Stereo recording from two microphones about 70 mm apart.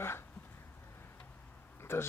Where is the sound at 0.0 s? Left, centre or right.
Left.